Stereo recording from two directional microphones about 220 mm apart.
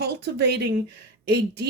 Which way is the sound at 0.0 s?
50° right (ahead or behind).